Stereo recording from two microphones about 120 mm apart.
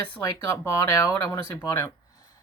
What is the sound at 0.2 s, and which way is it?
Speech, 25° left (ahead or behind).